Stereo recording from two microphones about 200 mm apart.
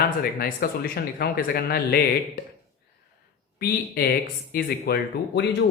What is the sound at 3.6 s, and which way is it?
A woman's voice, 50° left (ahead or behind).